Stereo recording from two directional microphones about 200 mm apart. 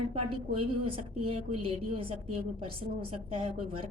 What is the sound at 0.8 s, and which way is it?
A woman's voice, 25° right (ahead or behind).